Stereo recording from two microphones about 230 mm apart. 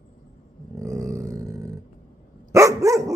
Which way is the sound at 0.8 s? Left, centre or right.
Centre.